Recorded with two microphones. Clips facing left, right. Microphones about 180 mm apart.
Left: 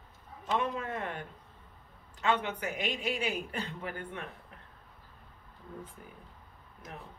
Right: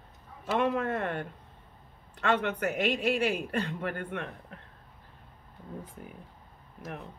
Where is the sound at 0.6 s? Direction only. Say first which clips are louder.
Right 6 dB; 60° right (ahead or behind).